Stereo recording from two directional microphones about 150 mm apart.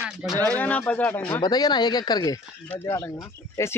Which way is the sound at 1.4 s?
30° left (ahead or behind).